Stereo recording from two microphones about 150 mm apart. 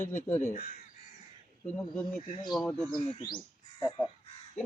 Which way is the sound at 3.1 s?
35° left (ahead or behind).